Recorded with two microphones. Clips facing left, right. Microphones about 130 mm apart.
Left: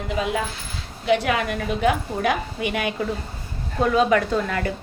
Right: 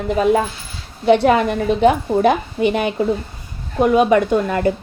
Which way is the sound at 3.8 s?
20° right (ahead or behind).